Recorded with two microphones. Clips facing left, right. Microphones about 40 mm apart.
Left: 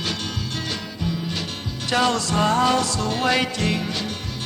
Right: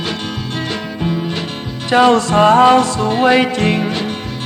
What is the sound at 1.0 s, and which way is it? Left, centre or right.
Music, right.